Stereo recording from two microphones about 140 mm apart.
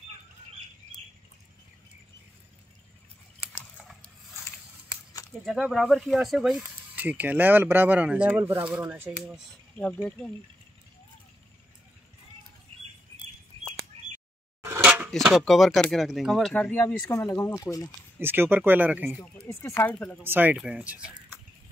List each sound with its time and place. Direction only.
5.4 s speech: centre (ahead or behind)
9.2 s speech: centre (ahead or behind)
13.9 s a sound: 45° right (ahead or behind)
14.6 s a sound: 15° right (ahead or behind)
15.2 s speech: centre (ahead or behind); by 17.9 s 25° left (ahead or behind)
18.2 s speech: 15° right (ahead or behind)
19.2 s speech: 15° left (ahead or behind)
20.2 s speech: 15° right (ahead or behind)